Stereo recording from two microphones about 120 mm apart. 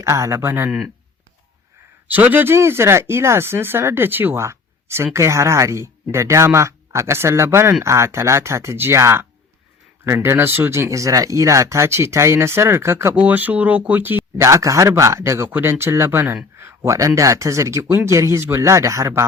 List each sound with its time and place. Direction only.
0.0 s speech: 25° right (ahead or behind)
2.0 s speech: 15° right (ahead or behind)